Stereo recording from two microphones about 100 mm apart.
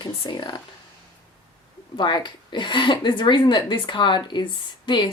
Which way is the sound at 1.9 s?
50° left (ahead or behind).